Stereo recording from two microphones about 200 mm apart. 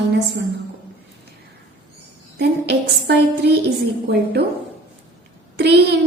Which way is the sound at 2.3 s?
55° right (ahead or behind).